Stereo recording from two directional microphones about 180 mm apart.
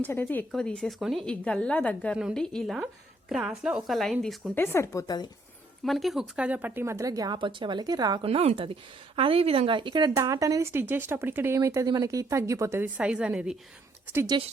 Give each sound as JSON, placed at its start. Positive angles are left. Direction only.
{"t": 0.0, "sound": "a woman's voice", "side_deg": 10}
{"t": 4.6, "sound": "speech", "side_deg": 15}
{"t": 5.8, "sound": "a woman's voice", "side_deg": 0}